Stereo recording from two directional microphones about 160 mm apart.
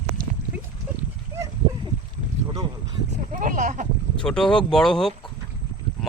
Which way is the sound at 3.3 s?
55° right (ahead or behind).